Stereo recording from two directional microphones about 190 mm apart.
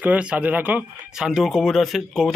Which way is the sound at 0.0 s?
5° right (ahead or behind).